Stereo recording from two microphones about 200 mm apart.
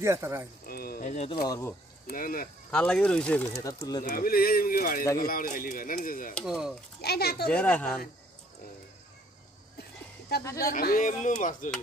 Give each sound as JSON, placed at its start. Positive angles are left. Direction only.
{"t": 0.0, "sound": "speech", "side_deg": -15}
{"t": 0.7, "sound": "a sound", "side_deg": 50}
{"t": 1.1, "sound": "speech", "side_deg": 30}
{"t": 1.5, "sound": "speech", "side_deg": 10}
{"t": 2.0, "sound": "speech", "side_deg": 45}
{"t": 2.7, "sound": "speech", "side_deg": 5}
{"t": 4.0, "sound": "speech", "side_deg": 45}
{"t": 6.3, "sound": "speech", "side_deg": 0}
{"t": 7.0, "sound": "speech", "side_deg": 55}
{"t": 7.4, "sound": "speech", "side_deg": 5}
{"t": 10.4, "sound": "speech", "side_deg": 15}
{"t": 10.7, "sound": "speech", "side_deg": 45}